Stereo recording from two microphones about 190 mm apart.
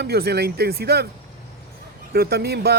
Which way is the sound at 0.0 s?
55° right (ahead or behind).